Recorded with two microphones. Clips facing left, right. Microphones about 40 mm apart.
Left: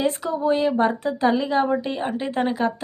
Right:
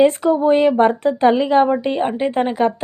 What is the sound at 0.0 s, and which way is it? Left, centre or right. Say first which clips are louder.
A woman's voice: right 9 dB; right.